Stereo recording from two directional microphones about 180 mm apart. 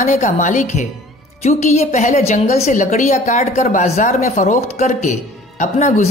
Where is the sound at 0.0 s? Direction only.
45° left (ahead or behind).